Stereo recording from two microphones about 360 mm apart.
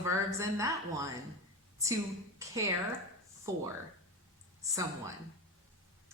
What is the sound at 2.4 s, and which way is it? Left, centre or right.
A woman's voice, centre.